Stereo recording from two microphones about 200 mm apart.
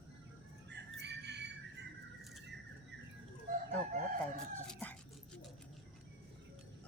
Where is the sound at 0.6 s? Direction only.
60° right (ahead or behind).